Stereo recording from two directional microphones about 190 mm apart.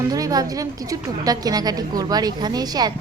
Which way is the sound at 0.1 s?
20° right (ahead or behind).